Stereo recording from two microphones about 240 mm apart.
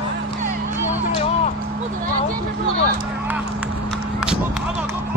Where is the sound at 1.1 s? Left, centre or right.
Left.